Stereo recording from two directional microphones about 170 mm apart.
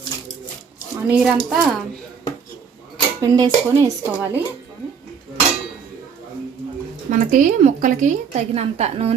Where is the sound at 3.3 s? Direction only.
20° right (ahead or behind).